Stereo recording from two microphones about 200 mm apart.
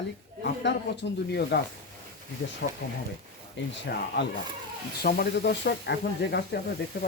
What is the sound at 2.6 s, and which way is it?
Speech, 60° left (ahead or behind).